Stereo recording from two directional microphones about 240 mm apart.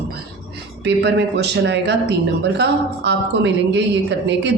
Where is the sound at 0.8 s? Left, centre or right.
Right.